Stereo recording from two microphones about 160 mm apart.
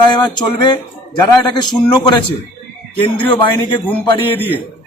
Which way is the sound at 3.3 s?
30° left (ahead or behind).